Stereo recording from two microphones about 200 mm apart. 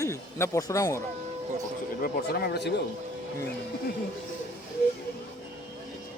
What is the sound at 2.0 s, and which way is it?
Speech, 50° left (ahead or behind).